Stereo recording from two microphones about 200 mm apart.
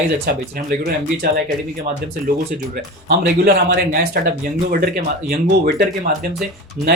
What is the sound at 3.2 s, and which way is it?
Speech, 50° right (ahead or behind).